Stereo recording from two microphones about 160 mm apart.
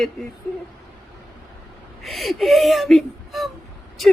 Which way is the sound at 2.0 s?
Centre (ahead or behind).